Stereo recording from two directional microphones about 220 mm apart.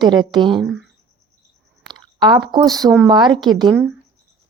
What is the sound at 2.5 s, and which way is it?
A woman's voice, 15° right (ahead or behind).